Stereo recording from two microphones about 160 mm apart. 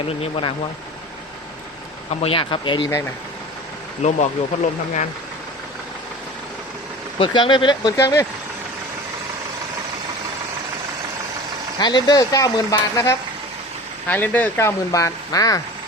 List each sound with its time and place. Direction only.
0.1 s speech: 35° left (ahead or behind)
2.0 s speech: 35° left (ahead or behind)
4.0 s speech: 50° left (ahead or behind)
7.2 s speech: 30° left (ahead or behind)
11.8 s speech: 25° left (ahead or behind)